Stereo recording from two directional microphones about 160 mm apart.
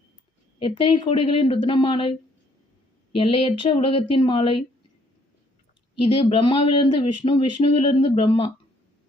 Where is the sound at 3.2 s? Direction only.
35° left (ahead or behind).